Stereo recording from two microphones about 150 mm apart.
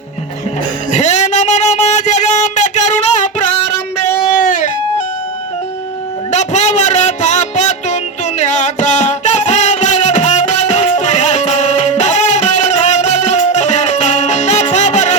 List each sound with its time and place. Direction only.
0.9 s a sound: 50° left (ahead or behind)
4.3 s music: 60° left (ahead or behind)
6.3 s music: 50° left (ahead or behind)